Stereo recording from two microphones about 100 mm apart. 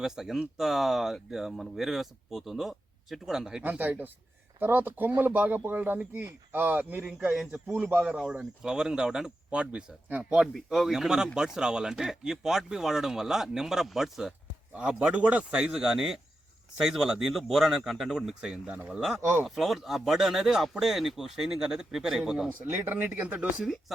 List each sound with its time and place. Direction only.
0.0 s speech: 5° right (ahead or behind)
3.6 s speech: 15° right (ahead or behind)
22.6 s speech: 20° right (ahead or behind)